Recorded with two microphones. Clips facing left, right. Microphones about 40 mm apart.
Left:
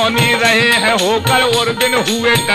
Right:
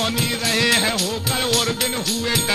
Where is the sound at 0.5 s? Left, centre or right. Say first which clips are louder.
Left 7 dB; left.